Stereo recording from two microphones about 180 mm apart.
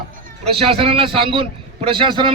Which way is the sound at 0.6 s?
30° right (ahead or behind).